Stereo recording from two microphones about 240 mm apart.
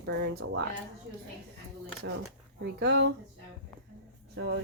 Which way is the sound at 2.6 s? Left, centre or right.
Right.